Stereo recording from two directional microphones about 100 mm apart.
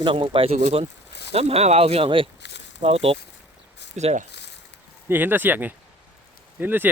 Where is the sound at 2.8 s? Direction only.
75° right (ahead or behind).